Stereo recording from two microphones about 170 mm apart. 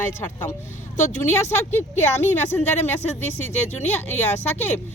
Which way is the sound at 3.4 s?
40° left (ahead or behind).